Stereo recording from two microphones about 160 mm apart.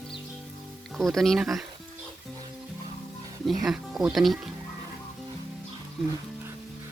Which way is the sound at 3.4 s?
Centre (ahead or behind).